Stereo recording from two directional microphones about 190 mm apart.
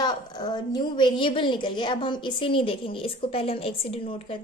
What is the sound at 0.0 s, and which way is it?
A woman's voice, 20° left (ahead or behind).